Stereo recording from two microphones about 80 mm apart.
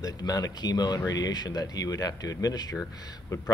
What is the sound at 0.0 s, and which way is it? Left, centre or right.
Speech, left.